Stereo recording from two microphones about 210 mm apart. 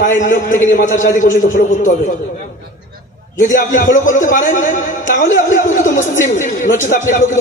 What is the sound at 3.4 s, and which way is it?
A man's voice, 40° left (ahead or behind).